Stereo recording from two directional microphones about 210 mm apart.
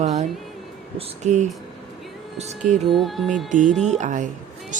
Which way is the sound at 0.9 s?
35° right (ahead or behind).